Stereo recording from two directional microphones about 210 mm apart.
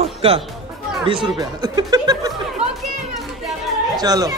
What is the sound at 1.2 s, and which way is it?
Speech, 20° right (ahead or behind).